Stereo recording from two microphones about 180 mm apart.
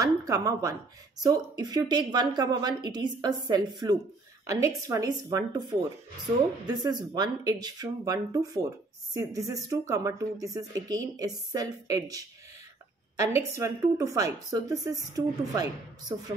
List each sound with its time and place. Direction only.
0.0 s a sound: 20° right (ahead or behind)
1.2 s speech: 20° right (ahead or behind)
13.6 s speech: 15° right (ahead or behind)